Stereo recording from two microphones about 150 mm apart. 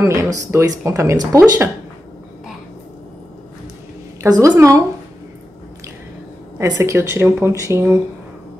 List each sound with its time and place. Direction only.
0.0 s speech: 20° right (ahead or behind)
4.2 s speech: 25° right (ahead or behind)
6.6 s speech: 20° right (ahead or behind)